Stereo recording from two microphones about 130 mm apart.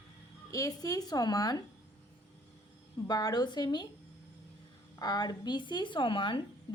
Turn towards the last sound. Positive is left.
turn(degrees=40)  # may be behind; listen again after turning